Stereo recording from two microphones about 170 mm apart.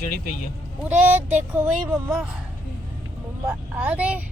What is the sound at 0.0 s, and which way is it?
Speech, 50° left (ahead or behind).